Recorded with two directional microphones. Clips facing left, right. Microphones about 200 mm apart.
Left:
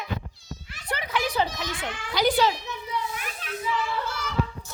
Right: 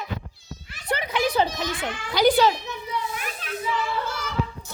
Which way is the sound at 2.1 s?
50° right (ahead or behind).